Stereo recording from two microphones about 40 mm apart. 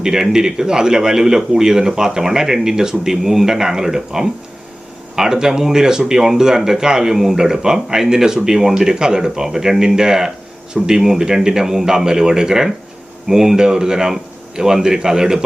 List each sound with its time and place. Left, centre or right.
0.0 s a man's voice: centre